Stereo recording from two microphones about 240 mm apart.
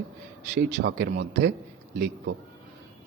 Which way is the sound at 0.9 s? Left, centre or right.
Right.